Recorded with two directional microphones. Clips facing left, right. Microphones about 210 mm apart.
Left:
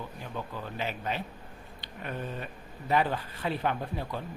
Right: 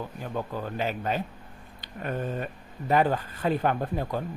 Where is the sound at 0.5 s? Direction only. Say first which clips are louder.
Right 5 dB; 45° right (ahead or behind).